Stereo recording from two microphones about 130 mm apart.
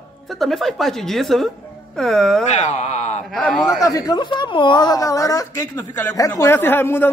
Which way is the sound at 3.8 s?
30° left (ahead or behind).